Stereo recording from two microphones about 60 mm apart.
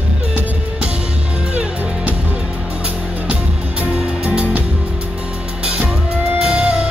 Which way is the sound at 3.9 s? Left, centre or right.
Centre.